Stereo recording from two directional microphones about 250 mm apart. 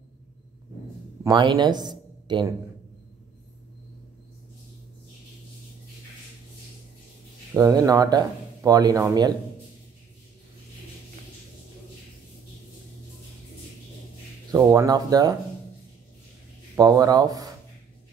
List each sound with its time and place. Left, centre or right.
1.2 s speech: centre
7.5 s speech: centre
14.5 s speech: centre
16.7 s speech: centre